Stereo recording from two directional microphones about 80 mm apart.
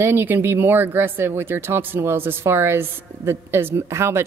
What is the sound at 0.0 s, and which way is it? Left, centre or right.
A woman's voice, right.